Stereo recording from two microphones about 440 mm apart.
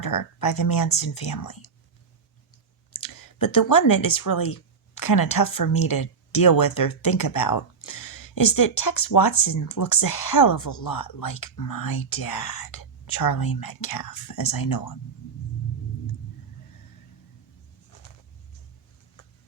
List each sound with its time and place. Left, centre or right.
0.0 s speech: left
3.0 s speech: left